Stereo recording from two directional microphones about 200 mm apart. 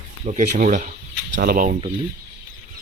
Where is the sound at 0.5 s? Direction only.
40° right (ahead or behind).